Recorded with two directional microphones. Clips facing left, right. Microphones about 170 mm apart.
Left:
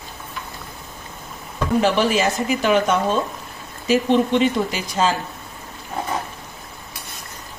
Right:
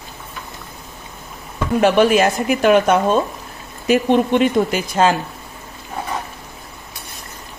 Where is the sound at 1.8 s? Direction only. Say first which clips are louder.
Right 5 dB; 55° right (ahead or behind).